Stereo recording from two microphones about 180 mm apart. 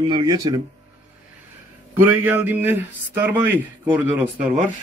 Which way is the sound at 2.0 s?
10° right (ahead or behind).